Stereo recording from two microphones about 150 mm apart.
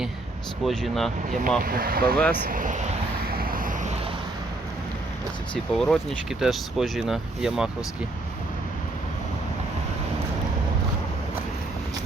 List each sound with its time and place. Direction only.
0.6 s speech: centre (ahead or behind)
1.6 s speech: 75° right (ahead or behind)
2.1 s speech: 10° left (ahead or behind)
2.5 s speech: 60° right (ahead or behind)
3.2 s vehicle: 80° right; by 3.9 s 65° right (ahead or behind)
5.7 s speech: centre (ahead or behind)